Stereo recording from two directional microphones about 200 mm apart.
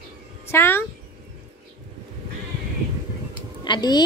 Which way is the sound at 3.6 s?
20° left (ahead or behind).